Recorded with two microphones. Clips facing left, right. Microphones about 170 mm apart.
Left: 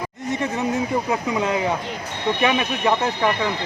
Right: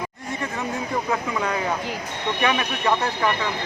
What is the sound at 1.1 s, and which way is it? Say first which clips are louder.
Speech: left 3 dB; 20° left (ahead or behind).